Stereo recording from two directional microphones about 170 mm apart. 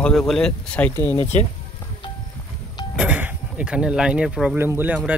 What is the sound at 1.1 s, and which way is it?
Speech, 35° left (ahead or behind).